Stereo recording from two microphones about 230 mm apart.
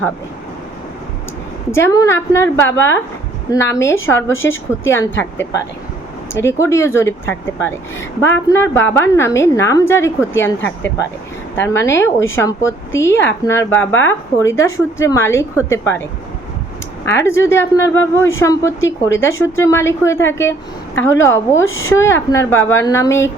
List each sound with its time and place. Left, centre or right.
1.7 s speech: centre
17.1 s speech: centre
21.7 s a woman's voice: left
21.9 s speech: centre